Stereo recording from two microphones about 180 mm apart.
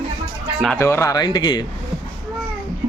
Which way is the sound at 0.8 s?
15° left (ahead or behind).